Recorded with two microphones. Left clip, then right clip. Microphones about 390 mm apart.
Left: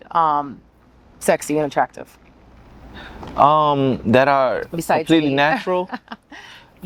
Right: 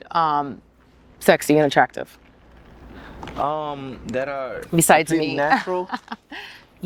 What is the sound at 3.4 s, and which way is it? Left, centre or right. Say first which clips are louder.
Speech: left 11 dB; left.